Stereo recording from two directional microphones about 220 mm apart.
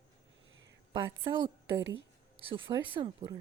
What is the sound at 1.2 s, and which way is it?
Speech, 20° right (ahead or behind).